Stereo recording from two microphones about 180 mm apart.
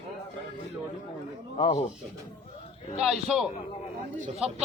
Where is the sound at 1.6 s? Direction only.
30° left (ahead or behind).